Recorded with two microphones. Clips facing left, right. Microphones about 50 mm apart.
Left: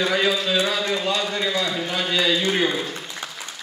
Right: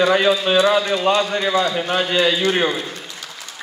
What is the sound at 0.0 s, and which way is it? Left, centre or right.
A man's voice, right.